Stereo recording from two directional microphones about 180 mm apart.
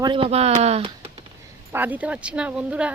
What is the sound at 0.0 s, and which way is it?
Speech, 30° right (ahead or behind).